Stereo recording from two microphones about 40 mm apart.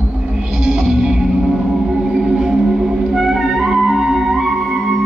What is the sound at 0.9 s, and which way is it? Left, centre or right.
Music, centre.